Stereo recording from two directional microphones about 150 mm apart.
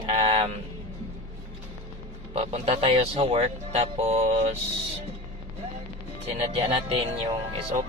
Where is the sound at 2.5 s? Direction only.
40° right (ahead or behind).